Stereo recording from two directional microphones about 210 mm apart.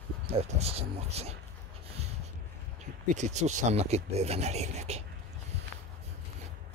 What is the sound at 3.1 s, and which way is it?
Speech, 35° right (ahead or behind).